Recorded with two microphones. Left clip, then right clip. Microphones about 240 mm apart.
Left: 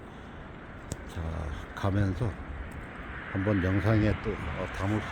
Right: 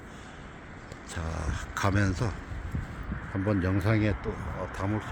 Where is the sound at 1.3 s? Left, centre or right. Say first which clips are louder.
Right 5 dB; centre.